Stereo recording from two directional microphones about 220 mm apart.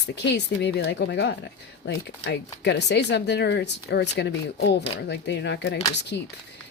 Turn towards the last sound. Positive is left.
turn(degrees=50)  # may be behind; listen again after turning